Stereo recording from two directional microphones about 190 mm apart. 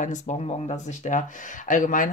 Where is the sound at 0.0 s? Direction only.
40° left (ahead or behind).